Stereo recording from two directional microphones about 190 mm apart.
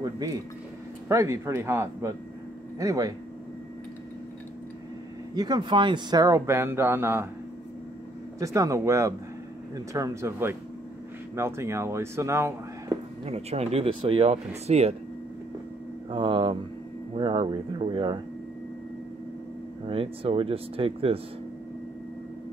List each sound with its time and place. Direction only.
0.0 s speech: 20° right (ahead or behind)
5.3 s speech: 20° right (ahead or behind)
8.4 s speech: 15° right (ahead or behind)
13.2 s speech: 35° right (ahead or behind)
16.1 s speech: 25° right (ahead or behind)
19.9 s speech: 30° right (ahead or behind)